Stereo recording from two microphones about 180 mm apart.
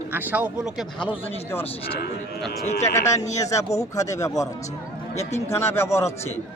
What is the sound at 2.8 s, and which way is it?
Speech, 15° left (ahead or behind).